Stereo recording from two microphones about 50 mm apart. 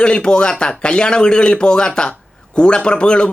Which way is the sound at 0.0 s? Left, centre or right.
Centre.